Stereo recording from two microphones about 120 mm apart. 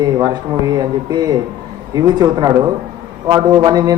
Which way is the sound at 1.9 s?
30° right (ahead or behind).